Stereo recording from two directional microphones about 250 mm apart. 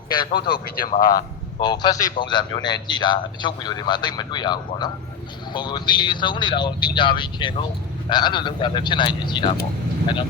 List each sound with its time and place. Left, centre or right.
0.3 s speech: left
1.5 s a man's voice: centre